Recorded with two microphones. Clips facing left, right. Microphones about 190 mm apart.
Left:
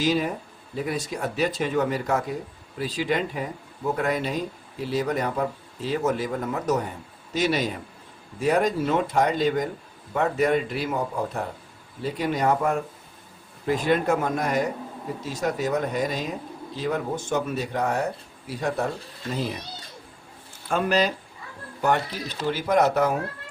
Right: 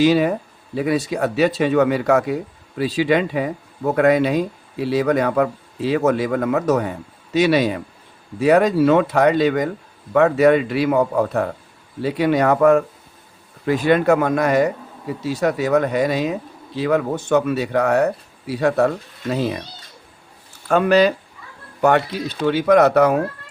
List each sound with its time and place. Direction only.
0.0 s speech: 70° right (ahead or behind)
20.7 s speech: 70° right (ahead or behind)